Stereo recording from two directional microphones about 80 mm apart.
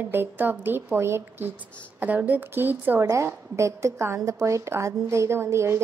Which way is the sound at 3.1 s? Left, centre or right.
Right.